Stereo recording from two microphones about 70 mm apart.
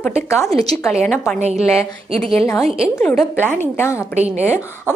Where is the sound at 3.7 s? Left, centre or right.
Left.